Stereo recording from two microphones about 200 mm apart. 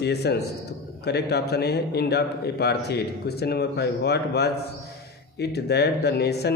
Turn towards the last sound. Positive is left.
turn(degrees=55)  # may be behind; listen again after turning